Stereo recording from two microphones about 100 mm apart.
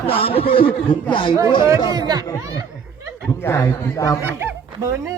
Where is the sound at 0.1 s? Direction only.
70° left (ahead or behind).